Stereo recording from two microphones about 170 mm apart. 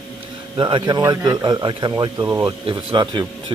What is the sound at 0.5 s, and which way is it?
A man's voice, 25° right (ahead or behind).